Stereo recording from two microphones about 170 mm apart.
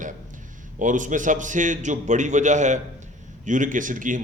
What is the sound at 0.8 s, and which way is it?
A man's voice, 50° right (ahead or behind).